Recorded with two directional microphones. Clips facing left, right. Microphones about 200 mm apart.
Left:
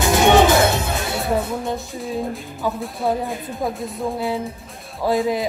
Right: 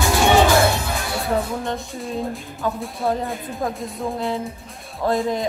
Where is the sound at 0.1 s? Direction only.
20° left (ahead or behind).